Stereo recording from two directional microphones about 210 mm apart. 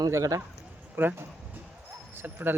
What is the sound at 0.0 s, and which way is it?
Speech, 15° right (ahead or behind).